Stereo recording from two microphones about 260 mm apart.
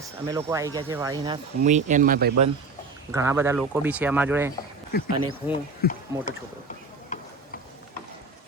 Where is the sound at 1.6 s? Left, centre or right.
Right.